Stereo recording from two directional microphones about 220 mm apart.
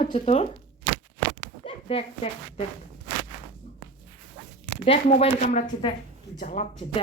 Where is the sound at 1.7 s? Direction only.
25° left (ahead or behind).